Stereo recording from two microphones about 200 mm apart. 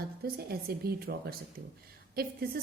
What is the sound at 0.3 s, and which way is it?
Speech, 50° right (ahead or behind).